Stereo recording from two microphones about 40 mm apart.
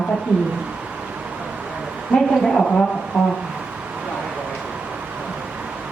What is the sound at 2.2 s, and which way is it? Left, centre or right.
Speech, centre.